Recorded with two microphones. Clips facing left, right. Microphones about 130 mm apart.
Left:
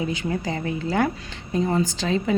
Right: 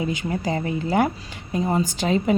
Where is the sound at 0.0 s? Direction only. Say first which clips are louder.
Right 1 dB; 20° right (ahead or behind).